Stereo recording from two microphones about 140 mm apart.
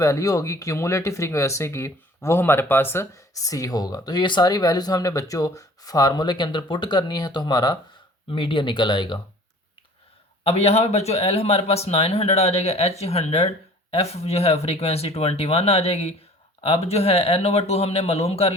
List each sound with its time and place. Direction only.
0.0 s speech: 20° left (ahead or behind)
10.4 s speech: 50° left (ahead or behind)